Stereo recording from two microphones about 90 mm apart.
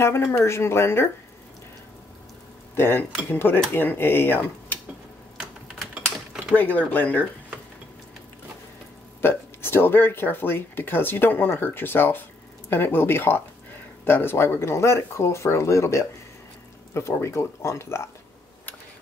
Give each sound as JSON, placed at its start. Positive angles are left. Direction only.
{"t": 0.0, "sound": "speech", "side_deg": 30}
{"t": 2.7, "sound": "speech", "side_deg": 25}
{"t": 5.8, "sound": "typing", "side_deg": 5}
{"t": 6.5, "sound": "speech", "side_deg": 20}
{"t": 9.2, "sound": "speech", "side_deg": 25}